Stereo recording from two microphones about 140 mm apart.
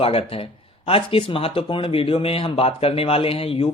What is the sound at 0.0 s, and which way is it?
Speech, 45° left (ahead or behind).